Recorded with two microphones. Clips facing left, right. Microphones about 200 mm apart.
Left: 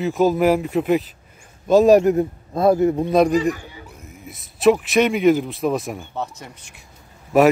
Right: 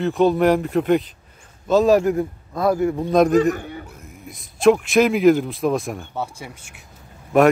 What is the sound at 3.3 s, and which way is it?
Speech, 55° right (ahead or behind).